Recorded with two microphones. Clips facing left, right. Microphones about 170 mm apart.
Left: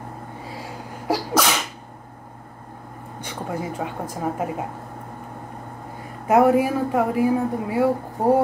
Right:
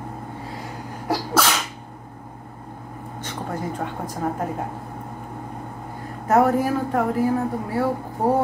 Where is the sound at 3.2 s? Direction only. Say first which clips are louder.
Even; 10° left (ahead or behind).